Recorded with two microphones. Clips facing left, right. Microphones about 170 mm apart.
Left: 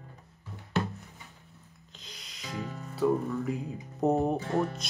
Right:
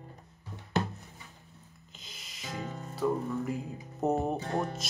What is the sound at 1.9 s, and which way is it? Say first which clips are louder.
Music: left 2 dB; 5° right (ahead or behind).